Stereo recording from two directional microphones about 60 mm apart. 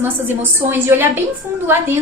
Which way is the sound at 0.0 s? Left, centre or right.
Right.